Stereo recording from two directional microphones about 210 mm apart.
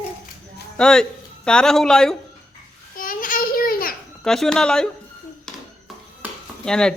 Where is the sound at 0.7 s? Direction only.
5° left (ahead or behind).